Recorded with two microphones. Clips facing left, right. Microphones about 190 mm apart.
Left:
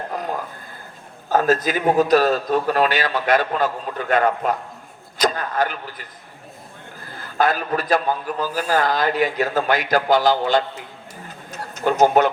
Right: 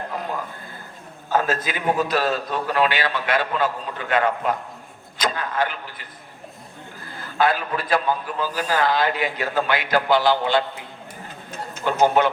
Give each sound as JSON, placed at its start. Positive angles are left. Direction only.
{"t": 1.3, "sound": "a man's voice", "side_deg": 45}
{"t": 7.3, "sound": "a man's voice", "side_deg": 45}
{"t": 11.8, "sound": "a man's voice", "side_deg": 45}